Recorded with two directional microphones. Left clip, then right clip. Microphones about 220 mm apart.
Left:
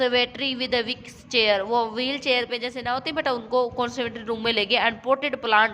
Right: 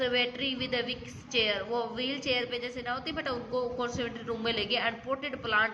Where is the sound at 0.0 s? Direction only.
50° left (ahead or behind).